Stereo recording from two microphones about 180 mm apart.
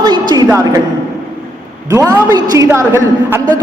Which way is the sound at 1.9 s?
15° right (ahead or behind).